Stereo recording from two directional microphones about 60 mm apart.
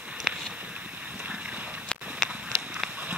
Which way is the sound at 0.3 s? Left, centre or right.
Centre.